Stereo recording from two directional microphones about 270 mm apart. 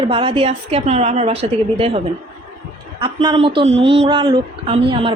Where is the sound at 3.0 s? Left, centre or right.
Centre.